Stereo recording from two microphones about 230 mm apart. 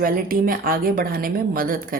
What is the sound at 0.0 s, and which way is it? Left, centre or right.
A woman's voice, right.